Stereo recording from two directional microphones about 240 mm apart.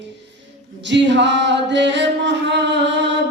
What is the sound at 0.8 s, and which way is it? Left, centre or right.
Chant, right.